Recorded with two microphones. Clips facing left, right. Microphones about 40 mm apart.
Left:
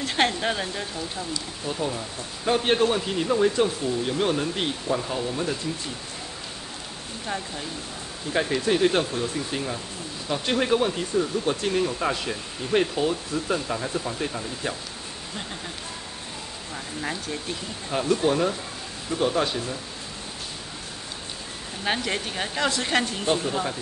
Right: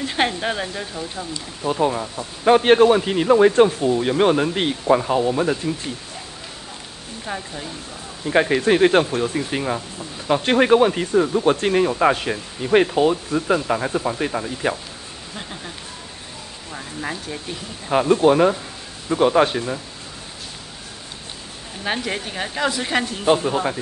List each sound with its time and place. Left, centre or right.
0.0 s speech: centre
1.6 s speech: right
7.2 s speech: centre
8.3 s speech: right
16.7 s speech: centre
17.8 s speech: right
21.8 s speech: centre
23.2 s speech: right